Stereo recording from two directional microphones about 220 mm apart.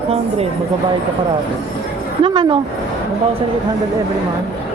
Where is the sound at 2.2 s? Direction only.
20° right (ahead or behind).